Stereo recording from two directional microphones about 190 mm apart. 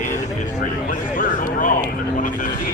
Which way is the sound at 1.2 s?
45° left (ahead or behind).